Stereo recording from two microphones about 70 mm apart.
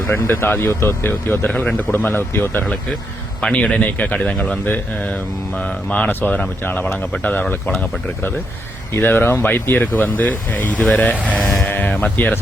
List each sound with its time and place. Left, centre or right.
0.1 s speech: left
0.7 s speech: left
1.5 s speech: centre
1.9 s speech: left
2.1 s speech: left
3.5 s speech: centre
5.5 s speech: left
8.9 s speech: left